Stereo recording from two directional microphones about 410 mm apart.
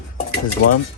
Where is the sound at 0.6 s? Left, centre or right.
Left.